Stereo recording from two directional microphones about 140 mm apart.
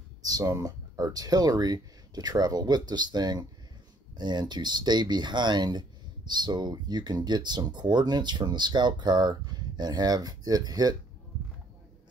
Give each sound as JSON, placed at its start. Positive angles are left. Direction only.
{"t": 0.2, "sound": "speech", "side_deg": -25}